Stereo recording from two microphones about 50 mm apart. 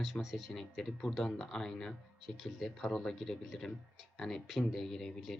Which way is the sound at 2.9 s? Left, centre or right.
Centre.